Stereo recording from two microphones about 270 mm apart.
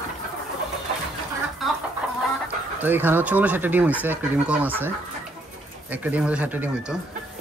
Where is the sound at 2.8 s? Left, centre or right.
Centre.